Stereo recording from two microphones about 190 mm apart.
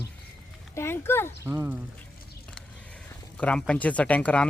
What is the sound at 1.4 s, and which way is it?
Speech, 10° right (ahead or behind).